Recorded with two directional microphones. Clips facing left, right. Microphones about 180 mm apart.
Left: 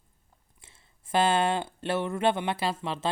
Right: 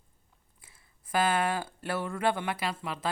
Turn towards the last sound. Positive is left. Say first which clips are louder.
# left 4 dB
turn(degrees=25)  # may be behind; listen again after turning